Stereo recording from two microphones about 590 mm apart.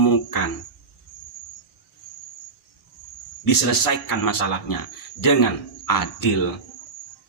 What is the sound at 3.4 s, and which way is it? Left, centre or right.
Speech, left.